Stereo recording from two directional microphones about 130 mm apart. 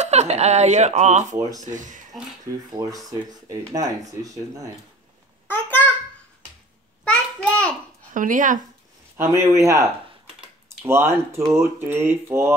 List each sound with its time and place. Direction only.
0.0 s speech: 60° right (ahead or behind)
1.6 s speech: 75° right (ahead or behind)
2.8 s speech: 35° right (ahead or behind)
5.5 s a sound: 15° left (ahead or behind)
7.1 s a sound: 10° left (ahead or behind)
8.1 s speech: 85° right
9.1 s speech: 20° right (ahead or behind)
10.9 s speech: 20° right (ahead or behind)